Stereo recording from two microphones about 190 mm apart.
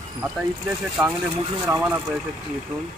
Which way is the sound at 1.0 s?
5° right (ahead or behind).